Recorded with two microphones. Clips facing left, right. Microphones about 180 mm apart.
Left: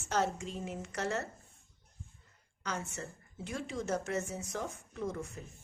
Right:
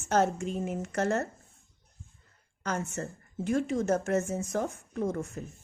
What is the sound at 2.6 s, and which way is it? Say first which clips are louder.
Speech: right 6 dB; 50° right (ahead or behind).